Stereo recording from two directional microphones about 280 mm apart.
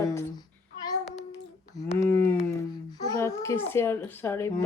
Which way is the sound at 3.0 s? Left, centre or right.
Centre.